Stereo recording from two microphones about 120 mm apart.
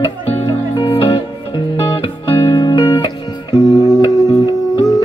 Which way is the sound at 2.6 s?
40° left (ahead or behind).